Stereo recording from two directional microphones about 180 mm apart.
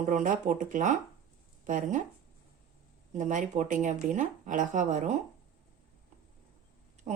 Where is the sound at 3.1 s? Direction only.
45° right (ahead or behind).